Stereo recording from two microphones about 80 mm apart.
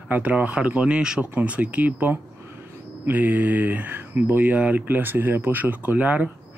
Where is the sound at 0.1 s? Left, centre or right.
Centre.